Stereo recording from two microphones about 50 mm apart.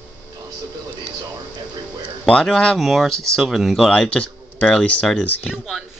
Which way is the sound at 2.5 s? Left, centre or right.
Centre.